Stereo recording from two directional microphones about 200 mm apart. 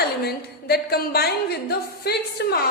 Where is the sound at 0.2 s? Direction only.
50° left (ahead or behind).